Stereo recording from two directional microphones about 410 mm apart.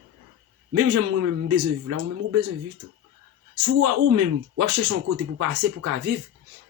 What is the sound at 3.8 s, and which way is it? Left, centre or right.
Speech, right.